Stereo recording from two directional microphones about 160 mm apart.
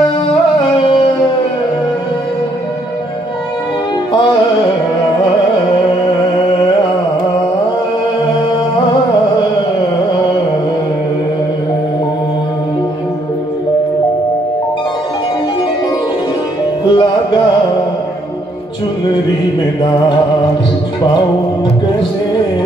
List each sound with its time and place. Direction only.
16.9 s music: 30° left (ahead or behind)